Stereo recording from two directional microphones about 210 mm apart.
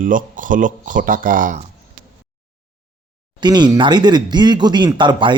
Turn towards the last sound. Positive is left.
turn(degrees=-20)  # may be behind; listen again after turning